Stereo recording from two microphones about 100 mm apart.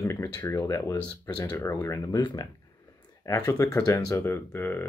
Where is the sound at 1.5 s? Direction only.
30° left (ahead or behind); by 2.5 s 45° left (ahead or behind).